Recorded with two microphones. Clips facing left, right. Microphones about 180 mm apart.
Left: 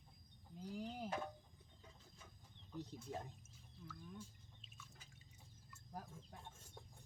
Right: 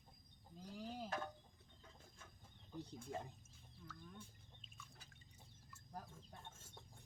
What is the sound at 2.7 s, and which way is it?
Speech, centre (ahead or behind).